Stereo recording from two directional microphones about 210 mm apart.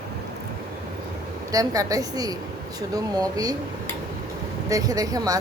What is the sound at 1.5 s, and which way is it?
A woman's voice, 15° right (ahead or behind).